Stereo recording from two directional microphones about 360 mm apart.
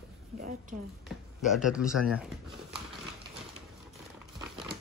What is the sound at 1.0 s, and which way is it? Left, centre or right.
Speech, centre.